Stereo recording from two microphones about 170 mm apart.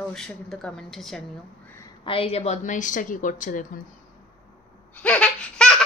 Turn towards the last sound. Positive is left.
turn(degrees=5)  # may be behind; listen again after turning